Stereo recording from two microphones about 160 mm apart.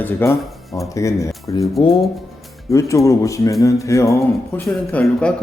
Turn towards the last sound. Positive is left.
turn(degrees=10)  # may be behind; listen again after turning